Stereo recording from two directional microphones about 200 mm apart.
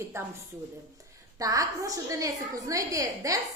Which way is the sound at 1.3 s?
15° right (ahead or behind).